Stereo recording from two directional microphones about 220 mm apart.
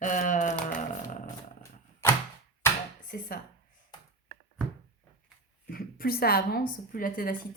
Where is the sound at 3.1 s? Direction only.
40° left (ahead or behind).